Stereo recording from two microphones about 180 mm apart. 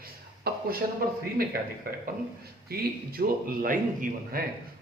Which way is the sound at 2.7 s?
60° right (ahead or behind).